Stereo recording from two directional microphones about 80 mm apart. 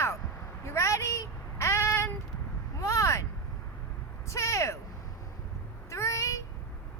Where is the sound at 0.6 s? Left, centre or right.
Left.